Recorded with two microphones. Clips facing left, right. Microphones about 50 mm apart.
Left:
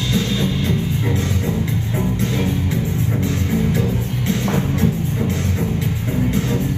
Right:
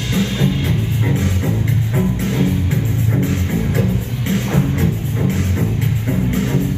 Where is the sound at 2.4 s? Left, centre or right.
Left.